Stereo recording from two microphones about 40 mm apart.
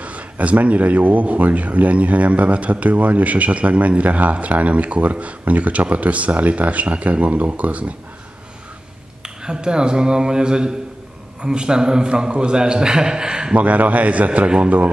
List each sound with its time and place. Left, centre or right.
0.0 s a man's voice: right
9.2 s speech: right
13.6 s a man's voice: right